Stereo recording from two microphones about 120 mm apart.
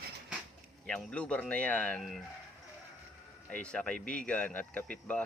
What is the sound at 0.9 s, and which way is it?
Speech, 10° left (ahead or behind).